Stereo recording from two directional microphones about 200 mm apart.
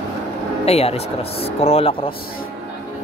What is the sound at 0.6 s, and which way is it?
Speech, 30° left (ahead or behind).